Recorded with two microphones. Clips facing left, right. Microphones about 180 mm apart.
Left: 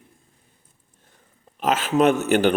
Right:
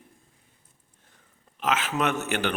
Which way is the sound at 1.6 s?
35° left (ahead or behind).